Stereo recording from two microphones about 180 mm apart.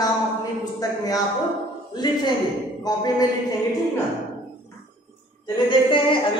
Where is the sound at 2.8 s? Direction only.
20° left (ahead or behind).